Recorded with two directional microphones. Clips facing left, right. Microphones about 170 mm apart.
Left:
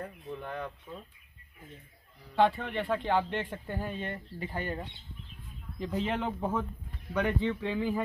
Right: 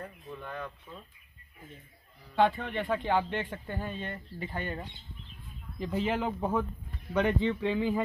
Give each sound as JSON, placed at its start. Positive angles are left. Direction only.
{"t": 0.5, "sound": "speech", "side_deg": 20}
{"t": 2.3, "sound": "speech", "side_deg": 0}
{"t": 3.4, "sound": "speech", "side_deg": 10}
{"t": 5.8, "sound": "speech", "side_deg": -5}
{"t": 7.2, "sound": "speech", "side_deg": -20}